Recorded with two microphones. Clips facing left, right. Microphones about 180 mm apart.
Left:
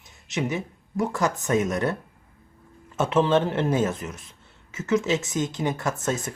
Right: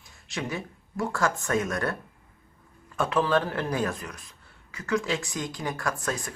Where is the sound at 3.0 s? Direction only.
25° left (ahead or behind).